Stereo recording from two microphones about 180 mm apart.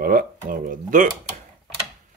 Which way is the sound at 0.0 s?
50° right (ahead or behind).